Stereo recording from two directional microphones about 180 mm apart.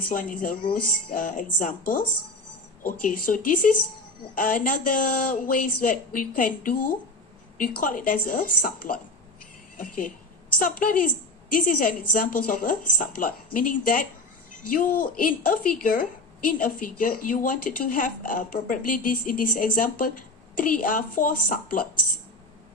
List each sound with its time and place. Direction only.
0.1 s a woman's voice: 50° left (ahead or behind)
11.5 s a woman's voice: 50° left (ahead or behind)